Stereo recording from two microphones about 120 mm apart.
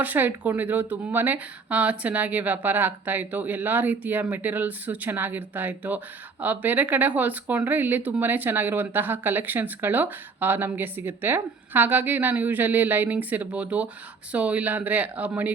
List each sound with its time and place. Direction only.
0.0 s speech: 15° right (ahead or behind)